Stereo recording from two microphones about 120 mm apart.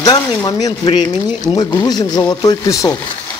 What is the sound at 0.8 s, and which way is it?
Speech, 40° left (ahead or behind).